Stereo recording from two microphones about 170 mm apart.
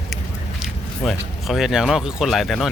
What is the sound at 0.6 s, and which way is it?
Speech, centre (ahead or behind).